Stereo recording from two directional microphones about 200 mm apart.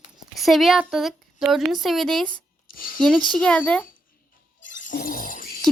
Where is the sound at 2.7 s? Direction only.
45° left (ahead or behind).